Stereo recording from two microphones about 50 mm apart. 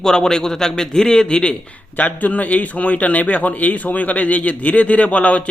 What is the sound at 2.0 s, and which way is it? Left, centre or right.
Speech, left.